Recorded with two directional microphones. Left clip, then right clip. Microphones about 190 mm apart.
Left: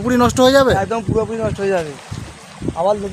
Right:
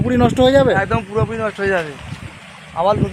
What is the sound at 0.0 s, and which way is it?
Speech, 5° left (ahead or behind).